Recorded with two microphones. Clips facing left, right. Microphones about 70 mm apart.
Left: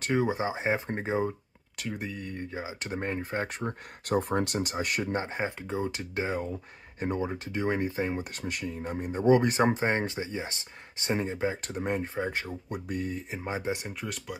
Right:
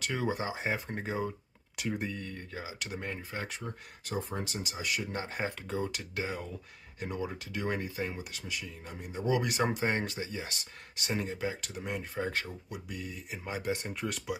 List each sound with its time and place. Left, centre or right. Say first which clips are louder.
0.1 s speech: left 7 dB; left
1.8 s speech: right 1 dB; centre
2.2 s speech: left 5 dB; left
5.1 s speech: left 4 dB; left
8.3 s speech: left 6 dB; left
12.2 s speech: left 2 dB; left
12.6 s speech: left 8 dB; left; by 13.9 s centre
14.0 s speech: right 1 dB; centre